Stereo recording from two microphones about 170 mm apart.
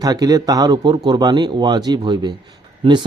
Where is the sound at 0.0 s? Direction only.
20° right (ahead or behind).